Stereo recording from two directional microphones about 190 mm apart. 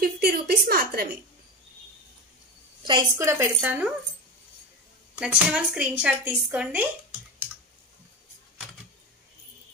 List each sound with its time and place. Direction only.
0.0 s a sound: 55° right (ahead or behind)
2.9 s a woman's voice: 20° right (ahead or behind)
5.1 s speech: 5° right (ahead or behind)